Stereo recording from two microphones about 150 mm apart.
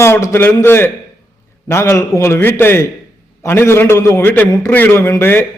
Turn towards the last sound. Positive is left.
turn(degrees=15)  # may be behind; listen again after turning